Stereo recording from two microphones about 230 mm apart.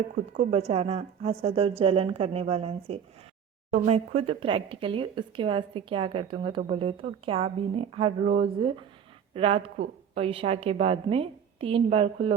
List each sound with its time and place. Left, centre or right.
0.7 s speech: right